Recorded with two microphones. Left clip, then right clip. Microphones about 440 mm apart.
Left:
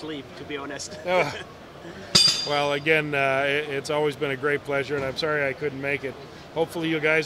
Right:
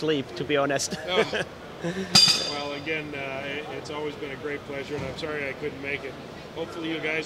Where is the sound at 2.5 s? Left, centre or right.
Left.